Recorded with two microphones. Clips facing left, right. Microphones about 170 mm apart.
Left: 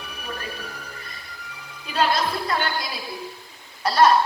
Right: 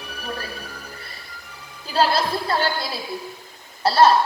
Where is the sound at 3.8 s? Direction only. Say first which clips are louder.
Right 2 dB; 30° right (ahead or behind).